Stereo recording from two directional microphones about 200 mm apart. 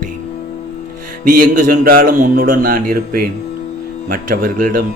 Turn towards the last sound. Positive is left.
turn(degrees=-45)  # may be behind; listen again after turning